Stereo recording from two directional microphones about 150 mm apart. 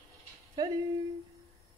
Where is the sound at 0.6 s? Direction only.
25° right (ahead or behind).